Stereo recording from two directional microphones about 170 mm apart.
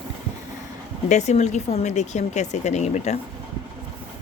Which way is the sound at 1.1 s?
45° left (ahead or behind).